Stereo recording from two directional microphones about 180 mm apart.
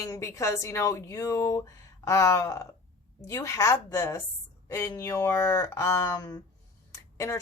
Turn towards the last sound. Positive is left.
turn(degrees=15)  # may be behind; listen again after turning